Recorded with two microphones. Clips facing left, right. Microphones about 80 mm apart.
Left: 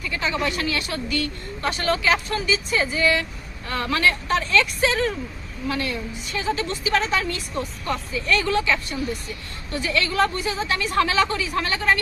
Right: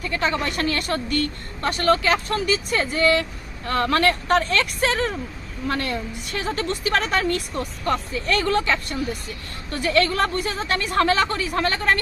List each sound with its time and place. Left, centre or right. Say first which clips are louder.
0.0 s a woman's voice: right 1 dB; right